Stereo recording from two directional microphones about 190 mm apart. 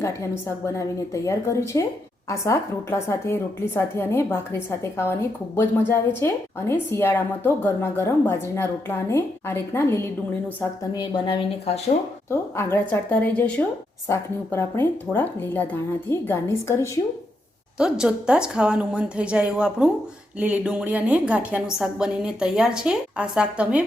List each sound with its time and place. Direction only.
0.7 s a woman's voice: 15° left (ahead or behind)
10.9 s a woman's voice: 25° left (ahead or behind)
12.3 s a woman's voice: 15° left (ahead or behind)
17.7 s a woman's voice: 5° right (ahead or behind)